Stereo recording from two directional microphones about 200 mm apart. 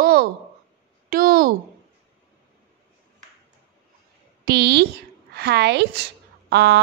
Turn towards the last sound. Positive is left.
turn(degrees=-55)  # may be behind; listen again after turning